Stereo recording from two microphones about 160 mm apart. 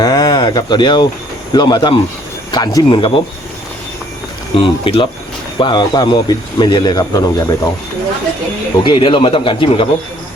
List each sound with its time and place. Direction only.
0.0 s a sound: 25° left (ahead or behind)
1.5 s speech: 25° left (ahead or behind)
4.5 s speech: 35° left (ahead or behind)
8.8 s speech: 30° left (ahead or behind)